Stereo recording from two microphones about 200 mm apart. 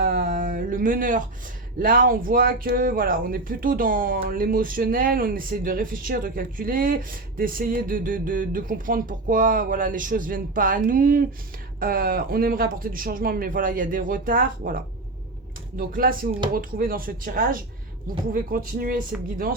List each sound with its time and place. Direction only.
0.0 s a sound: 45° right (ahead or behind)
1.8 s speech: 45° right (ahead or behind)
15.9 s speech: 45° right (ahead or behind)